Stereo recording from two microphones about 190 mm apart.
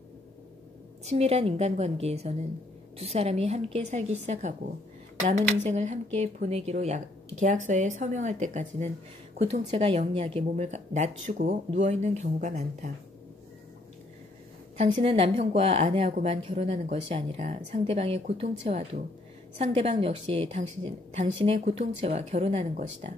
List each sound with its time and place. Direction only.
1.0 s a woman's voice: 35° right (ahead or behind)
14.8 s a woman's voice: 30° right (ahead or behind)